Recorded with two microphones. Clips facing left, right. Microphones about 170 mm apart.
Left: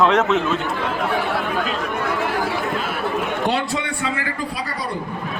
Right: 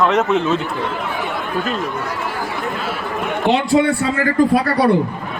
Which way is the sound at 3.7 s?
35° right (ahead or behind).